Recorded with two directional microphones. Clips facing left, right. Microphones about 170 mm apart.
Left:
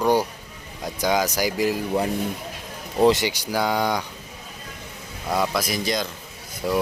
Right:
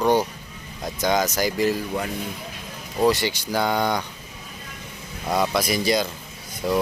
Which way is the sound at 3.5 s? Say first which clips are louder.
Even; 10° left (ahead or behind).